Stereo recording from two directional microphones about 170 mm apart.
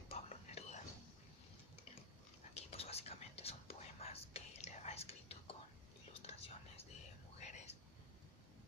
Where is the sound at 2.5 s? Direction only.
35° left (ahead or behind).